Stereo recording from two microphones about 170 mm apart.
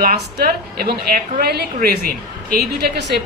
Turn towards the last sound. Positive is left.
turn(degrees=-75)  # may be behind; listen again after turning